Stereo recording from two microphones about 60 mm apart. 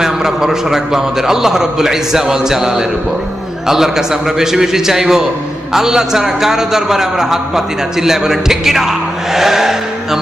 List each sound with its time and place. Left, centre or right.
0.0 s a man's voice: centre